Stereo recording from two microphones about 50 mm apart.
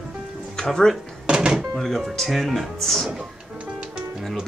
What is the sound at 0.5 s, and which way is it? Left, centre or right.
Speech, centre.